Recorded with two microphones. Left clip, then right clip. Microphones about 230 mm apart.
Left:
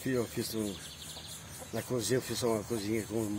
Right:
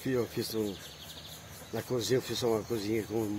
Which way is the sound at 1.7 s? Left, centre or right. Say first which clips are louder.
Right 2 dB; right.